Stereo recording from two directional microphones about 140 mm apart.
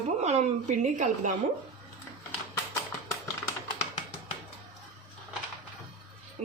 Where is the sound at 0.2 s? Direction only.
50° right (ahead or behind).